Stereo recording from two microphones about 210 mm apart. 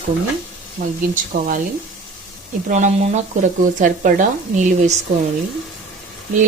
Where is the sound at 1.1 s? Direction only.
40° right (ahead or behind).